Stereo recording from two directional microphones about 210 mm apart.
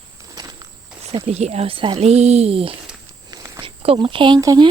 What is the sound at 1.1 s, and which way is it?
Speech, 30° right (ahead or behind).